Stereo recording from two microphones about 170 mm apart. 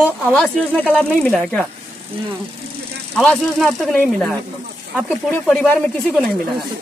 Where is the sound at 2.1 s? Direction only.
35° right (ahead or behind).